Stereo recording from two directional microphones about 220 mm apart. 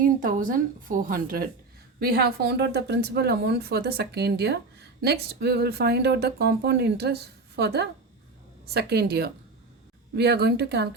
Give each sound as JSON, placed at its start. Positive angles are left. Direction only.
{"t": 0.2, "sound": "a woman's voice", "side_deg": -40}